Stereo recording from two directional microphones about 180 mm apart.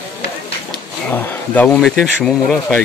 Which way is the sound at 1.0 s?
10° left (ahead or behind).